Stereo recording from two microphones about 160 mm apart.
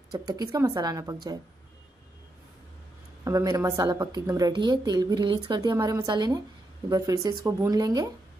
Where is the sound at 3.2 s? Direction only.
20° right (ahead or behind).